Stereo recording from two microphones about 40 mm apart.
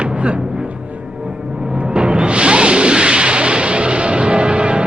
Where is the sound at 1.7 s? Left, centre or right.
Right.